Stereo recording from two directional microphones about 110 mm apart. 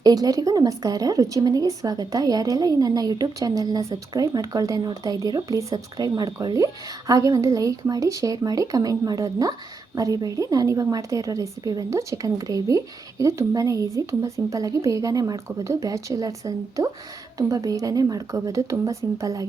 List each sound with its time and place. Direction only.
0.0 s a woman's voice: 35° right (ahead or behind)